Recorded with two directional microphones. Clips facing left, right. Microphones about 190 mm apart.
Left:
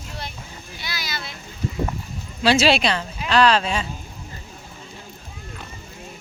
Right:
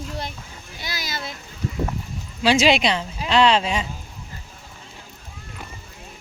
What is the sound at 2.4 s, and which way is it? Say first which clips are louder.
A woman's voice: even; 15° right (ahead or behind).